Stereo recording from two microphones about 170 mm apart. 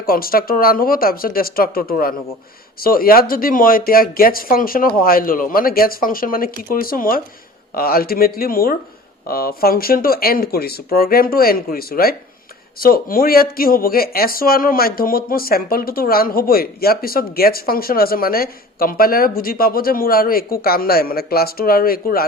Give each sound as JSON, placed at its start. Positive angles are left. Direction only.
{"t": 0.0, "sound": "speech", "side_deg": 60}